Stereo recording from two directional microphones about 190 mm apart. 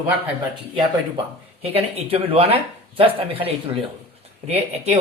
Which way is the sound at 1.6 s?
30° right (ahead or behind).